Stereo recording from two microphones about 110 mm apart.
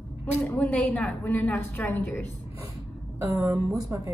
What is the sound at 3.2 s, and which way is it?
Speech, 25° right (ahead or behind).